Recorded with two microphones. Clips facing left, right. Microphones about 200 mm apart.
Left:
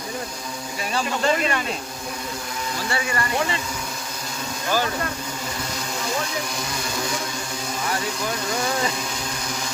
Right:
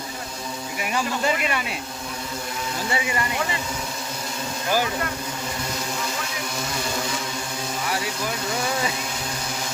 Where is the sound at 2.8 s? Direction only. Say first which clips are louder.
Right 1 dB; 20° right (ahead or behind).